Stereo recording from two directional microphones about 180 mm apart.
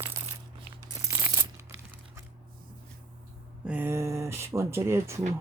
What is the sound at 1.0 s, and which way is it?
Coin, 15° right (ahead or behind).